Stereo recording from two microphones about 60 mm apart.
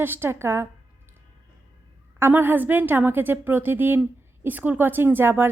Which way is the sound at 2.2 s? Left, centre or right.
Right.